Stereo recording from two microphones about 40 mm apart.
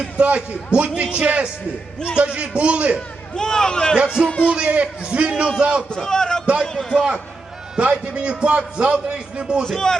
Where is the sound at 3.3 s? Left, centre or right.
Centre.